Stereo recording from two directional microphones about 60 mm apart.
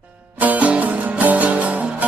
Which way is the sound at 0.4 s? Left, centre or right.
Right.